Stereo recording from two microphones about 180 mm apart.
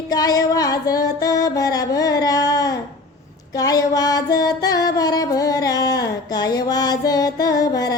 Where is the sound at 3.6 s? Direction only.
20° left (ahead or behind).